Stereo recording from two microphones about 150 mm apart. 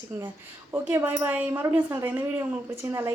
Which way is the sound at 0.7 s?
15° right (ahead or behind).